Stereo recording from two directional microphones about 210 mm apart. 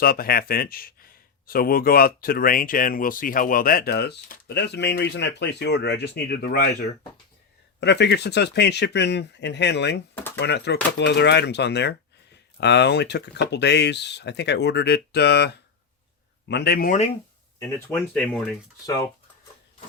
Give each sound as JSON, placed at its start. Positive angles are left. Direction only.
{"t": 0.0, "sound": "speech", "side_deg": 45}
{"t": 7.8, "sound": "speech", "side_deg": 55}
{"t": 17.6, "sound": "speech", "side_deg": 10}
{"t": 18.9, "sound": "speech", "side_deg": 20}